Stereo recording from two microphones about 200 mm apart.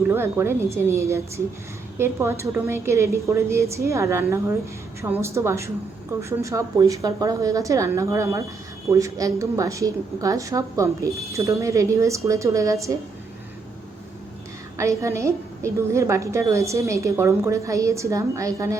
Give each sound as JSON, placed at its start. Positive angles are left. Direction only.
{"t": 0.1, "sound": "a woman's voice", "side_deg": -10}
{"t": 14.8, "sound": "a woman's voice", "side_deg": -15}